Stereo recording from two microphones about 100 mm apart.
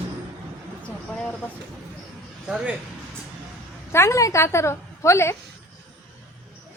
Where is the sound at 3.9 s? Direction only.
30° left (ahead or behind).